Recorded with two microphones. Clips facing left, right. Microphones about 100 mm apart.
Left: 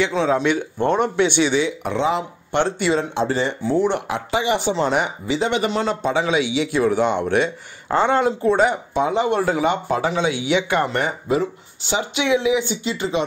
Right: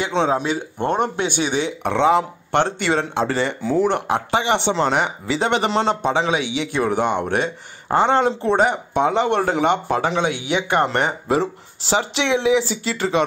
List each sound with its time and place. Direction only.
0.1 s speech: 25° right (ahead or behind)
0.8 s speech: 50° right (ahead or behind); by 3.7 s 70° right (ahead or behind)
3.9 s speech: 45° right (ahead or behind)
4.5 s speech: 75° right (ahead or behind)
5.8 s a man's voice: 30° right (ahead or behind)
6.4 s speech: 50° right (ahead or behind)
8.1 s a man's voice: 30° right (ahead or behind)
8.5 s speech: 55° right (ahead or behind); by 13.2 s 80° right